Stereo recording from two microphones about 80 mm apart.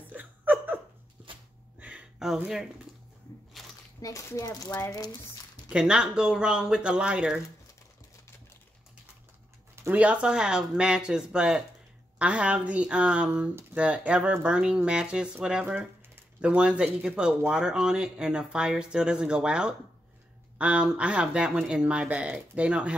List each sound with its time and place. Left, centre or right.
0.1 s laughter: right
1.8 s a sound: centre
4.0 s speech: left
5.7 s speech: centre
9.9 s speech: centre